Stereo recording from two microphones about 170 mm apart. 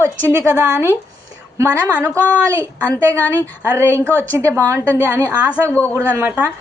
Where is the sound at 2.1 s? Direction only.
10° left (ahead or behind).